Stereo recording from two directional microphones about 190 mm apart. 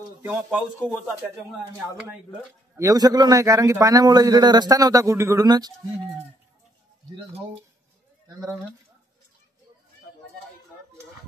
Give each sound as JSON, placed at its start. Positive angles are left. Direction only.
{"t": 0.3, "sound": "speech", "side_deg": -5}
{"t": 8.3, "sound": "speech", "side_deg": -15}